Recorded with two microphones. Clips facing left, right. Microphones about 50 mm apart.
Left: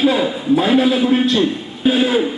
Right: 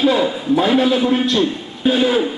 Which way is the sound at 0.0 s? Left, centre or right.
Centre.